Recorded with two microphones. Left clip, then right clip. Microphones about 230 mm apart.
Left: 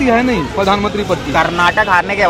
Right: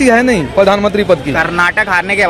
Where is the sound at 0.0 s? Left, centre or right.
Right.